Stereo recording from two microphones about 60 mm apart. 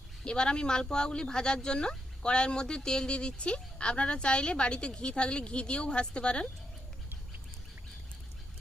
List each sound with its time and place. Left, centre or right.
0.3 s speech: centre